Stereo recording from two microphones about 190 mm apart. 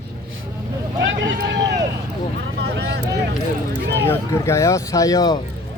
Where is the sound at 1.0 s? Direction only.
75° right (ahead or behind).